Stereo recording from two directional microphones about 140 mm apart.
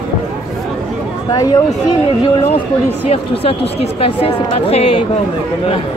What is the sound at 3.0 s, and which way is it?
A woman's voice, 45° left (ahead or behind).